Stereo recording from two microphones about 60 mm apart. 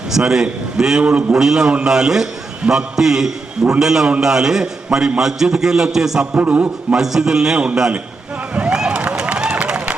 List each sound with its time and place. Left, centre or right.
0.1 s a man's voice: centre
6.3 s a man's voice: right
6.9 s a man's voice: centre
8.5 s run: centre